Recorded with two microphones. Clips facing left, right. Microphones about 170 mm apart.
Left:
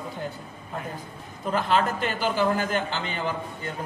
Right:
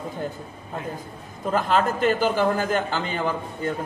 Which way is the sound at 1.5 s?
45° right (ahead or behind).